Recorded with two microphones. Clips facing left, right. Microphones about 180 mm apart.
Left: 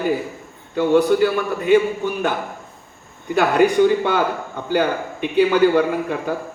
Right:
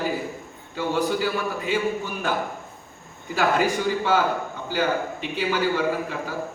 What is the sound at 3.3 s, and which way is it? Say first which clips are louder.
A man's voice: left 7 dB; 60° left (ahead or behind).